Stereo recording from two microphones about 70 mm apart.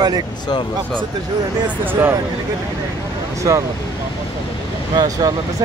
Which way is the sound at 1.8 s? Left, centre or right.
Right.